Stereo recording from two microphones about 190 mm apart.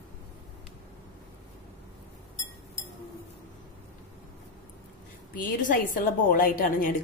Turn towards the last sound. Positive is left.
turn(degrees=45)  # may be behind; listen again after turning